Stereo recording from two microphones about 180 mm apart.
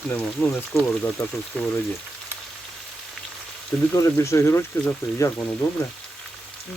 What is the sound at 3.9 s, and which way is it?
Speech, 15° left (ahead or behind).